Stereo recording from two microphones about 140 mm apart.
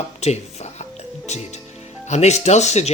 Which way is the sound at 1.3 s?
55° left (ahead or behind).